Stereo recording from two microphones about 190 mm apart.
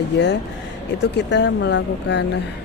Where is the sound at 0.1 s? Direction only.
65° left (ahead or behind).